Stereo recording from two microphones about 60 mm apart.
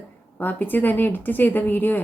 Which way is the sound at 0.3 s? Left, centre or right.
Left.